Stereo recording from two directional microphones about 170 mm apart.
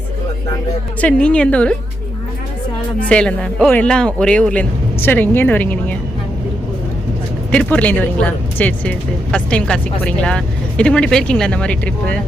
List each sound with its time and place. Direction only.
1.0 s speech: 5° left (ahead or behind)
3.0 s speech: 5° left (ahead or behind)
7.5 s speech: 5° left (ahead or behind)